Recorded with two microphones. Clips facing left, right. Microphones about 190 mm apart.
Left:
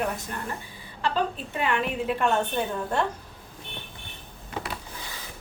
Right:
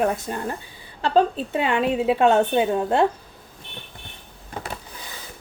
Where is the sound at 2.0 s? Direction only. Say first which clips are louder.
Right 8 dB; 90° right.